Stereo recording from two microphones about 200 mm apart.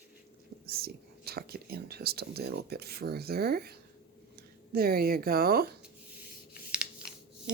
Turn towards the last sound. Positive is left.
turn(degrees=-5)  # may be behind; listen again after turning